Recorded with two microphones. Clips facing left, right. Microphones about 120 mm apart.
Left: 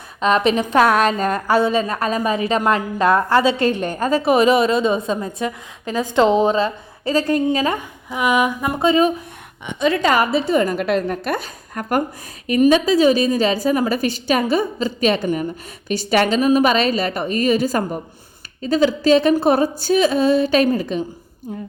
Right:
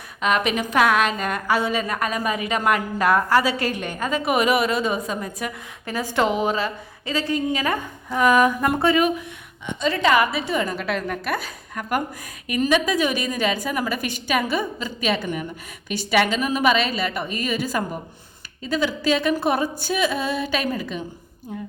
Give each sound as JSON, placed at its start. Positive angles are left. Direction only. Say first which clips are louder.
{"t": 0.2, "sound": "a woman's voice", "louder": "left 5 dB", "side_deg": 30}
{"t": 7.4, "sound": "a woman's voice", "louder": "left 4 dB", "side_deg": 25}
{"t": 8.1, "sound": "a sound", "louder": "right 1 dB", "side_deg": 10}
{"t": 8.8, "sound": "a woman's voice", "louder": "left 5 dB", "side_deg": 25}
{"t": 9.6, "sound": "a woman's voice", "louder": "left 5 dB", "side_deg": 60}
{"t": 10.0, "sound": "a woman's voice", "louder": "right 2 dB", "side_deg": 40}
{"t": 12.6, "sound": "a woman's voice", "louder": "left 7 dB", "side_deg": 30}